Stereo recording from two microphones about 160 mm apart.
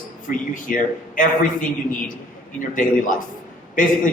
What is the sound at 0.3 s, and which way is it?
A man's voice, 55° left (ahead or behind).